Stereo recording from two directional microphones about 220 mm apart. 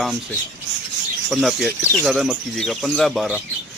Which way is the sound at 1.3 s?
Centre (ahead or behind).